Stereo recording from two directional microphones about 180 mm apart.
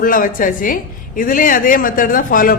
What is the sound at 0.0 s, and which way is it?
A woman's voice, 50° left (ahead or behind).